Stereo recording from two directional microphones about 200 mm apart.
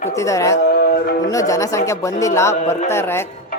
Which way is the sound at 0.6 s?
50° left (ahead or behind).